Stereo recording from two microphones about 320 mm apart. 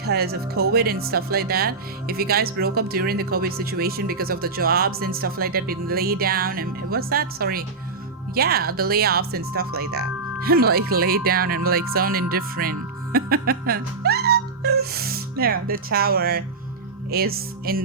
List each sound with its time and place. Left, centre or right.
0.0 s speech: right
13.1 s music: right
17.1 s speech: right